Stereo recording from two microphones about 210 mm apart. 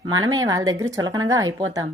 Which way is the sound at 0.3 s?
15° right (ahead or behind).